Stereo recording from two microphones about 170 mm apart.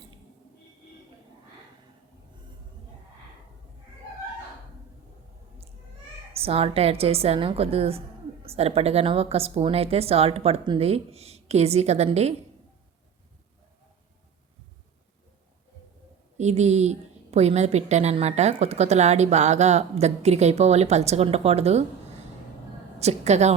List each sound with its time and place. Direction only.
6.3 s a woman's voice: 35° right (ahead or behind)
16.4 s a woman's voice: 40° right (ahead or behind)
23.0 s a woman's voice: 40° right (ahead or behind)